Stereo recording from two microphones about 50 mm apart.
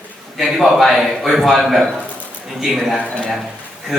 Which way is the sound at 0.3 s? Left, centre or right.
Centre.